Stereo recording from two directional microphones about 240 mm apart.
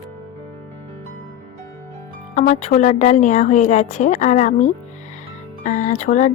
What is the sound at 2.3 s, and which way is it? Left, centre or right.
Speech, left.